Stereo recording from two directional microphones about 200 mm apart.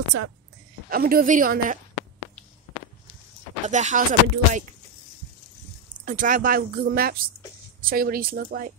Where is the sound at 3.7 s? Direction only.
35° right (ahead or behind).